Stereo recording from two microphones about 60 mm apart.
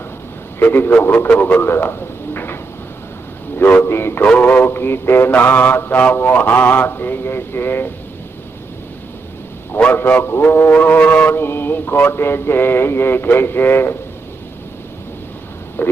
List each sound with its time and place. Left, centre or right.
0.6 s mantra: left
1.3 s a man's voice: left
3.8 s mantra: left
4.3 s music: left
4.7 s mantra: left
9.7 s music: left
10.4 s mantra: left
10.7 s music: left
11.3 s mantra: left
15.8 s speech: left